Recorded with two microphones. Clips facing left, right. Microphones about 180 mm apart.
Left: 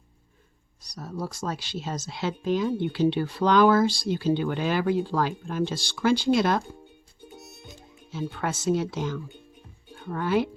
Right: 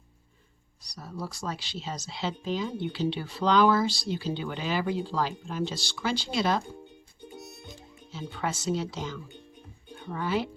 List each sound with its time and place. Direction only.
0.8 s speech: 45° left (ahead or behind)
7.3 s music: centre (ahead or behind)
8.1 s speech: 55° left (ahead or behind)